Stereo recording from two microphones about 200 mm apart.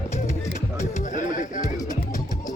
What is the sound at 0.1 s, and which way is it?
Music, 35° left (ahead or behind).